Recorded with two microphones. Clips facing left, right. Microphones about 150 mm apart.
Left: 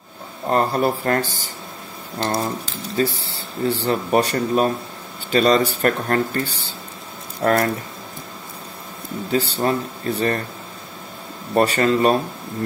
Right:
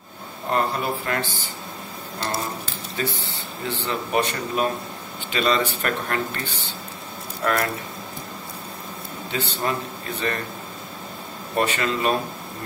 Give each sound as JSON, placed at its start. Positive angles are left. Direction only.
{"t": 0.5, "sound": "speech", "side_deg": 40}
{"t": 2.6, "sound": "speech", "side_deg": 35}
{"t": 9.3, "sound": "speech", "side_deg": 40}
{"t": 11.5, "sound": "speech", "side_deg": 40}